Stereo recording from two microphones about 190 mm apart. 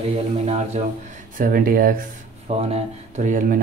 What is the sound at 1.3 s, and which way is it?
Speech, 45° right (ahead or behind).